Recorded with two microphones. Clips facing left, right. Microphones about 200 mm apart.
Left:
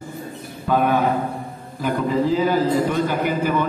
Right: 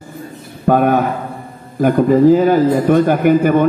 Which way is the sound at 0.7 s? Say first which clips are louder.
Right 5 dB; 50° right (ahead or behind).